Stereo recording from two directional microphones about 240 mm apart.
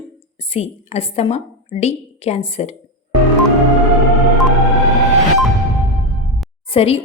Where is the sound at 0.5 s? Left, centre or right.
Left.